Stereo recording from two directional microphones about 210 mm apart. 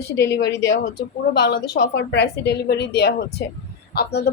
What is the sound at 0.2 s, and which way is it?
A woman's voice, 55° left (ahead or behind).